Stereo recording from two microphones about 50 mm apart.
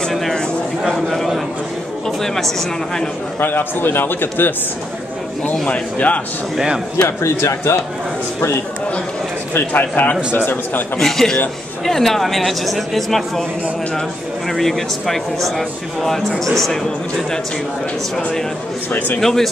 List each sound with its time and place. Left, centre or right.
0.9 s a sound: centre
3.3 s a man's voice: left
5.7 s a man's voice: left
6.5 s a man's voice: centre
7.1 s speech: left
9.7 s a man's voice: left
11.0 s a man's voice: centre
14.5 s speech: centre
18.9 s a man's voice: left
19.1 s a man's voice: centre